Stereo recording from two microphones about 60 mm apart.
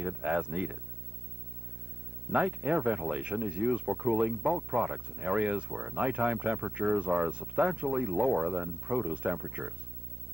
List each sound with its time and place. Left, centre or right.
0.0 s speech: centre
2.3 s speech: right